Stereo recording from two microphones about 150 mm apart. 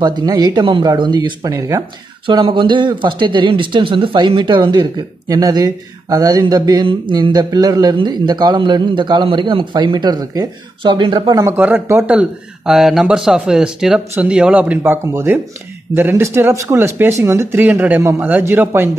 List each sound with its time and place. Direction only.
0.0 s speech: 30° right (ahead or behind)
2.2 s speech: 35° right (ahead or behind)
11.5 s speech: 10° right (ahead or behind)
12.2 s speech: centre (ahead or behind)